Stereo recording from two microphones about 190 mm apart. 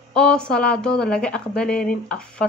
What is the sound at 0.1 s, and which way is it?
Speech, 5° left (ahead or behind).